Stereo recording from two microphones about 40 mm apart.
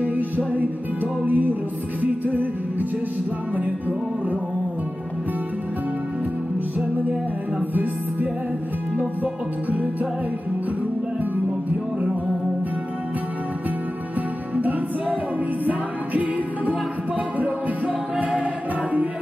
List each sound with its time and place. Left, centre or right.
1.2 s music: right
7.7 s music: right
14.5 s music: right